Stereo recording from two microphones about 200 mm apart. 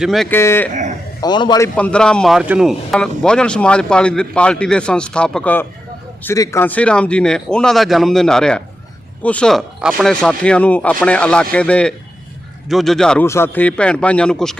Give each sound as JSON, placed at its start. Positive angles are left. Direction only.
{"t": 0.0, "sound": "speech", "side_deg": 0}
{"t": 0.3, "sound": "speech", "side_deg": 10}
{"t": 0.7, "sound": "speech", "side_deg": -35}
{"t": 1.2, "sound": "a man's voice", "side_deg": 20}
{"t": 1.7, "sound": "speech", "side_deg": 5}